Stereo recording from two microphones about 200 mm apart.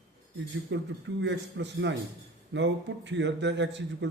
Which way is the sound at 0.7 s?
65° right (ahead or behind).